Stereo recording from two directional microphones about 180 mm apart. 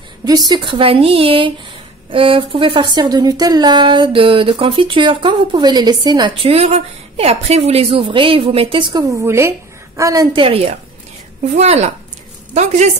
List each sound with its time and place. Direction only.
0.5 s speech: 25° right (ahead or behind)
9.2 s a woman's voice: 15° right (ahead or behind); by 12.9 s 40° right (ahead or behind)